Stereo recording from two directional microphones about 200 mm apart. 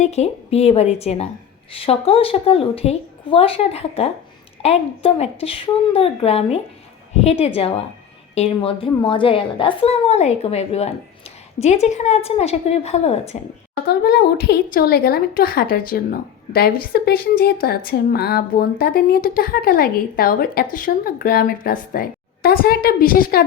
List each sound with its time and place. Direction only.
0.0 s a woman's voice: 30° left (ahead or behind)
13.8 s speech: 50° left (ahead or behind)